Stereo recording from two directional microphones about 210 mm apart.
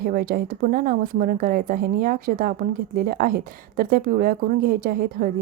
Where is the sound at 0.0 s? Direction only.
45° right (ahead or behind).